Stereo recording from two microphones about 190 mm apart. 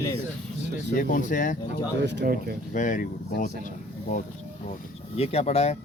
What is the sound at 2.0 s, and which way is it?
Speech, 65° right (ahead or behind).